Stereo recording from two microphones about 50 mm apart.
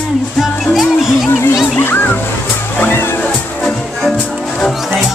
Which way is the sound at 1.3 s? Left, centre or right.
Left.